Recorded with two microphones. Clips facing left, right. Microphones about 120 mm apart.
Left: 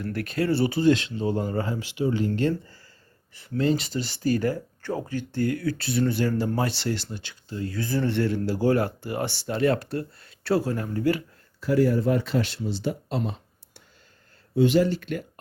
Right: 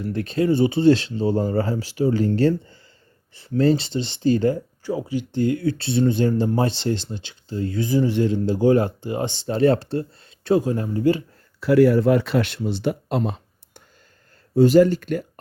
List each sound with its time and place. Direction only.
0.0 s speech: 25° right (ahead or behind)
4.8 s speech: 10° right (ahead or behind)
11.6 s speech: 75° right (ahead or behind); by 13.3 s 60° right (ahead or behind)
14.5 s speech: 40° right (ahead or behind)